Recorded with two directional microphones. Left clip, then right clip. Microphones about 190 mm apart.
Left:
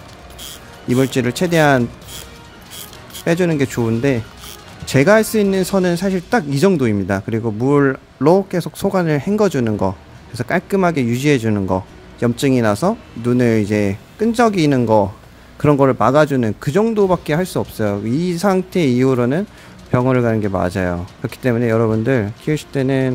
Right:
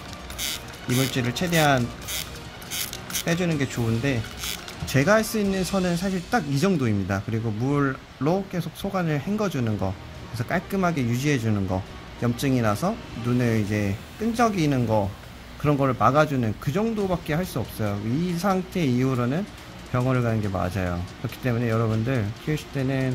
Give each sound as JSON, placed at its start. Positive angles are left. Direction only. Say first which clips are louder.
{"t": 0.8, "sound": "a man's voice", "louder": "left 9 dB", "side_deg": 60}
{"t": 3.3, "sound": "a man's voice", "louder": "left 10 dB", "side_deg": 65}
{"t": 4.8, "sound": "a man's voice", "louder": "left 8 dB", "side_deg": 55}